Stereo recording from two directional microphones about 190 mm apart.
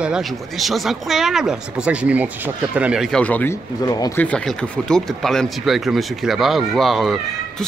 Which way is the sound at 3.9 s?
20° left (ahead or behind).